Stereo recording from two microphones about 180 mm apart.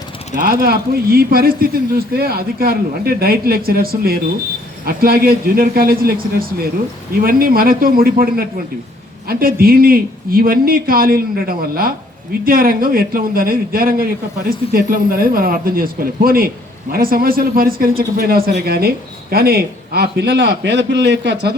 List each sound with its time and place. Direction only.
0.3 s a man's voice: 55° right (ahead or behind); by 21.5 s 75° right (ahead or behind)